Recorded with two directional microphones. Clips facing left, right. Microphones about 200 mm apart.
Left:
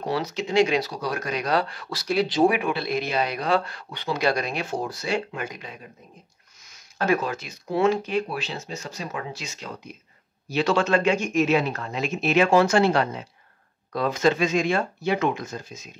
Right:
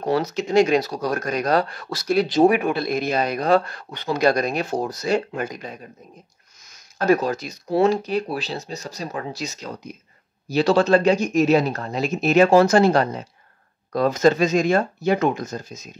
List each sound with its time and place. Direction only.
0.1 s speech: 45° right (ahead or behind)